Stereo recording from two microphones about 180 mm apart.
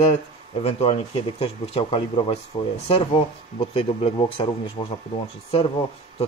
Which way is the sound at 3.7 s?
30° left (ahead or behind).